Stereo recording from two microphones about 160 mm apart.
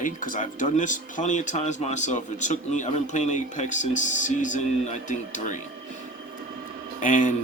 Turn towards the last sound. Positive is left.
turn(degrees=50)  # may be behind; listen again after turning